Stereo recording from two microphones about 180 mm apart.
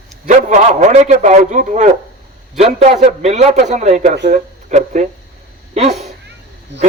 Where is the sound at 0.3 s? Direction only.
40° right (ahead or behind).